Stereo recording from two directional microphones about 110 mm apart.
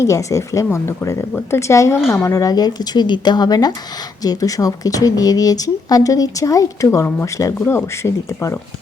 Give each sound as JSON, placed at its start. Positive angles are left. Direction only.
{"t": 0.0, "sound": "speech", "side_deg": 30}